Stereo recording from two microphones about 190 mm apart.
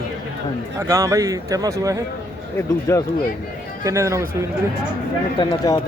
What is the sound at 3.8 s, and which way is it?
Speech, 15° right (ahead or behind).